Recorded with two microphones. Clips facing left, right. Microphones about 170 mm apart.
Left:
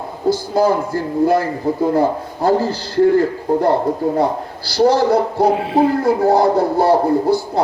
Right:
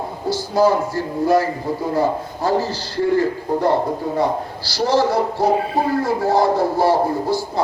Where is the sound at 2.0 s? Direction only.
55° left (ahead or behind).